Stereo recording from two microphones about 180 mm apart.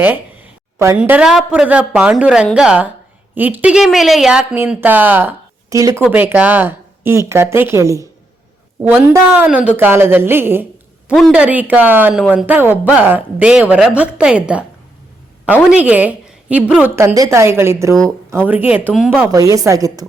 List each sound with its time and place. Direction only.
0.9 s a woman's voice: 5° right (ahead or behind)
11.1 s a woman's voice: centre (ahead or behind); by 20.1 s 20° right (ahead or behind)